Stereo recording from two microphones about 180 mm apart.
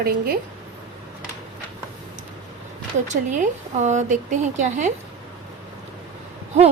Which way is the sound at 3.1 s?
45° right (ahead or behind).